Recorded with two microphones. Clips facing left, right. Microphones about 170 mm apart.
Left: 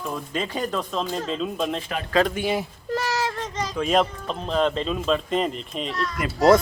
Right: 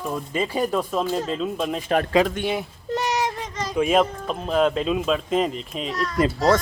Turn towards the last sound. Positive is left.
turn(degrees=15)  # may be behind; listen again after turning